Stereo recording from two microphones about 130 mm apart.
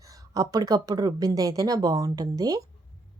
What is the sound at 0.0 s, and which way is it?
A woman's voice, 25° right (ahead or behind).